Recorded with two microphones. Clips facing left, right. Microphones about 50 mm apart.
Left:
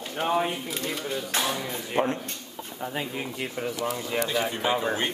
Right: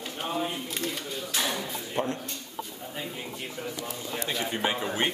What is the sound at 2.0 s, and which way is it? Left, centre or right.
Speech, left.